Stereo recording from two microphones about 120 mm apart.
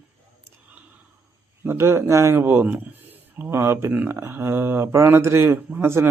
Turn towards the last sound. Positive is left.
turn(degrees=-20)  # may be behind; listen again after turning